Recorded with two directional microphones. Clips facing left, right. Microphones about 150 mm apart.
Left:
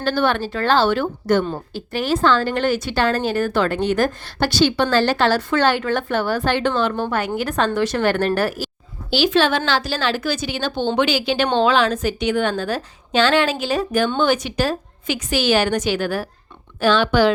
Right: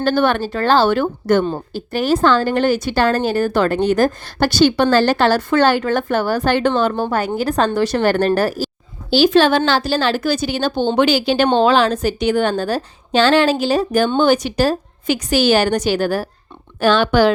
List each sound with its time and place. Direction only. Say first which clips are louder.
0.0 s speech: right 3 dB; 50° right (ahead or behind)
16.8 s speech: right 2 dB; 45° right (ahead or behind)